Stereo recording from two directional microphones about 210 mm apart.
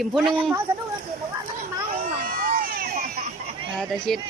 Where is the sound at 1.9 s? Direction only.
40° right (ahead or behind).